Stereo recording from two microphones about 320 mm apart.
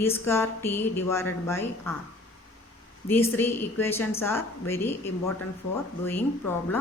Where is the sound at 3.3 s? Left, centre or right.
Centre.